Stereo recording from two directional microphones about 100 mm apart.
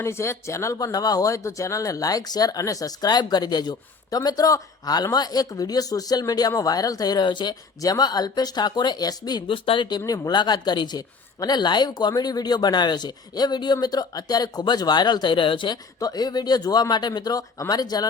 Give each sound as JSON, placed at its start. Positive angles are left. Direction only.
{"t": 0.0, "sound": "speech", "side_deg": 25}
{"t": 9.5, "sound": "speech", "side_deg": 55}
{"t": 16.0, "sound": "speech", "side_deg": 40}